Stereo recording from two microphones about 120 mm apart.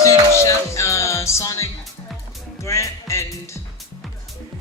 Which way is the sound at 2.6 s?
25° left (ahead or behind).